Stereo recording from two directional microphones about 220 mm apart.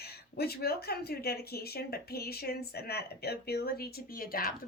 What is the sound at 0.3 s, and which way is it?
A woman's voice, 45° left (ahead or behind).